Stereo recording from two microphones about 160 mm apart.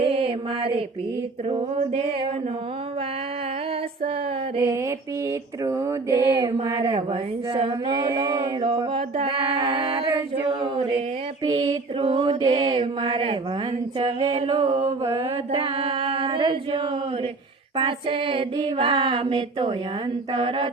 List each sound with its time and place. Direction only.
0.0 s mantra: 35° right (ahead or behind)
1.5 s female singing: 35° right (ahead or behind)
5.6 s mantra: 20° right (ahead or behind)
8.6 s a sound: 35° right (ahead or behind)
11.4 s female singing: 25° right (ahead or behind)
14.0 s mantra: 25° right (ahead or behind)
15.1 s chant: 35° right (ahead or behind)
17.7 s female singing: 30° right (ahead or behind)